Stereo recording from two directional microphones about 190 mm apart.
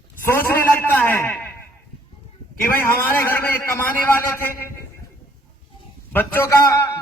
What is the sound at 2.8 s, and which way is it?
A man's voice, 15° left (ahead or behind).